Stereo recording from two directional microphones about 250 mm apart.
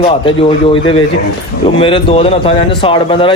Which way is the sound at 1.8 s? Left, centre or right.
Left.